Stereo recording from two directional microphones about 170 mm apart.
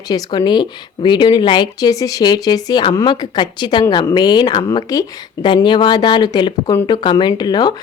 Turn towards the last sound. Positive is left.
turn(degrees=25)  # may be behind; listen again after turning